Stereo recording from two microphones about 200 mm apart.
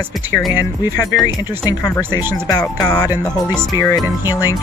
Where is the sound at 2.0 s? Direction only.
10° right (ahead or behind).